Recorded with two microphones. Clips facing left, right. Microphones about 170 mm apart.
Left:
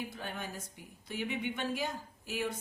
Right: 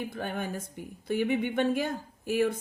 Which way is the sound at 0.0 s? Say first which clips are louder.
Right 7 dB; 55° right (ahead or behind).